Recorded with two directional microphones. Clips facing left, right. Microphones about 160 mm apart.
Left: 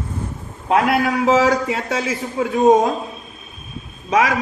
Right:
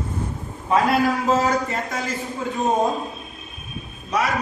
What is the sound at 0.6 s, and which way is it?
A man's voice, 65° left (ahead or behind).